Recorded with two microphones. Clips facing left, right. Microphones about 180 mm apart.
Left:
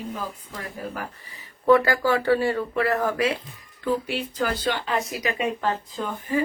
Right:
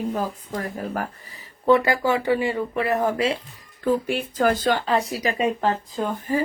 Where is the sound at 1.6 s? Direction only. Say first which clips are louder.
Even; 20° right (ahead or behind).